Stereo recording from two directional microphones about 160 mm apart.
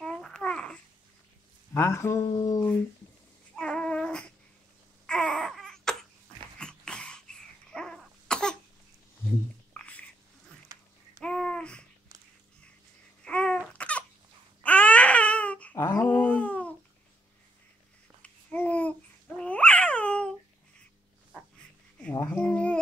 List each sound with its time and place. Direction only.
0.0 s babbling: 5° left (ahead or behind)
1.7 s speech: 15° left (ahead or behind)
3.5 s babbling: 5° left (ahead or behind)
5.0 s baby cry: 5° left (ahead or behind)
6.6 s cough: 5° left (ahead or behind)
9.8 s a sound: 10° left (ahead or behind)
11.1 s babbling: 5° left (ahead or behind)
13.2 s babbling: 5° left (ahead or behind)
13.7 s a sound: 10° left (ahead or behind)
14.6 s baby cry: 10° left (ahead or behind)
18.2 s babbling: 10° left (ahead or behind)
22.1 s a sound: 20° left (ahead or behind)
22.4 s a sound: 5° left (ahead or behind)